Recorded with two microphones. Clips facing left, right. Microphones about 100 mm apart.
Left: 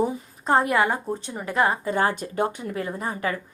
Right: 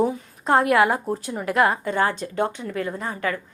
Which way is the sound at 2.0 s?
15° left (ahead or behind).